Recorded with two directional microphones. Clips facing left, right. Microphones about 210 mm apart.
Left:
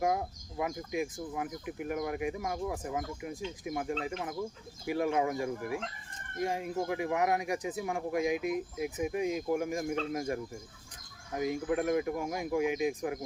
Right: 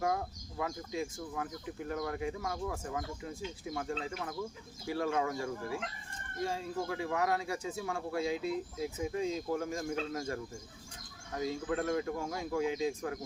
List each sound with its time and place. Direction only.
0.0 s speech: 20° left (ahead or behind)